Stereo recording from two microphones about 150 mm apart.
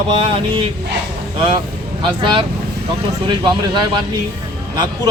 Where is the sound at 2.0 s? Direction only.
30° right (ahead or behind).